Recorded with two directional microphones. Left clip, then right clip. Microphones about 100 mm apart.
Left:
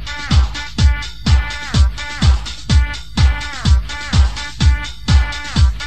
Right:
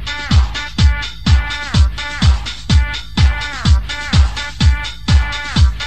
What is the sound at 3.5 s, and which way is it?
Music, 30° left (ahead or behind).